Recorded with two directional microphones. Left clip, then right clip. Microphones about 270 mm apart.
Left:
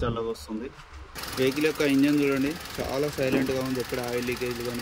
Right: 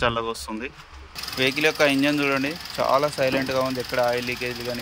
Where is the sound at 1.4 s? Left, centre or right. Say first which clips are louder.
Right 5 dB; centre.